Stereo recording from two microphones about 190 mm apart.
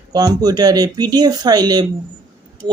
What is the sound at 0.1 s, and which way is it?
Speech, 20° right (ahead or behind).